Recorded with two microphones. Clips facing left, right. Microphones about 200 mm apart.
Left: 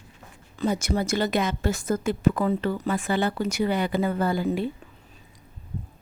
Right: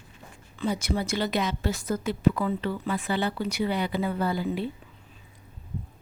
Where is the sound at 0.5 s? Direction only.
45° left (ahead or behind).